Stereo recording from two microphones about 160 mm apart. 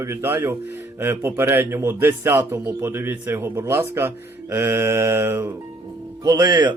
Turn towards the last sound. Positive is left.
turn(degrees=-25)  # may be behind; listen again after turning